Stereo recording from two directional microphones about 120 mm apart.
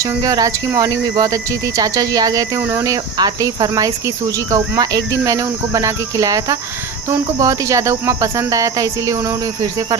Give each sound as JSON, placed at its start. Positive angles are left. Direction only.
{"t": 0.0, "sound": "speech", "side_deg": -30}
{"t": 2.6, "sound": "speech", "side_deg": -20}
{"t": 2.8, "sound": "speech", "side_deg": -30}